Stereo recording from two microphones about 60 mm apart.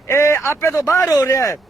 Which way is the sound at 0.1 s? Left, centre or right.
Left.